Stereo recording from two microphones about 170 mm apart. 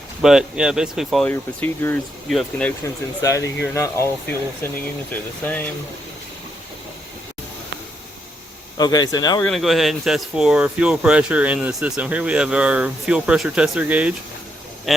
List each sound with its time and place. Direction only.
0.2 s speech: 5° right (ahead or behind)
1.3 s speech: 10° left (ahead or behind)
3.2 s speech: 20° left (ahead or behind)
8.8 s speech: 25° left (ahead or behind)
9.4 s speech: centre (ahead or behind)